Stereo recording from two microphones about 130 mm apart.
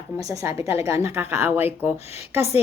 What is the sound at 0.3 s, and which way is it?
Speech, 25° right (ahead or behind).